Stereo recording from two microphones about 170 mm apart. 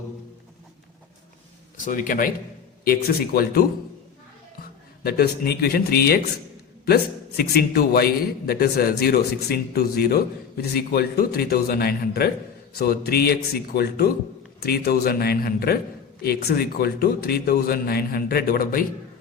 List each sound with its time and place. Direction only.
1.8 s a man's voice: 50° left (ahead or behind)
5.0 s a man's voice: 65° left (ahead or behind)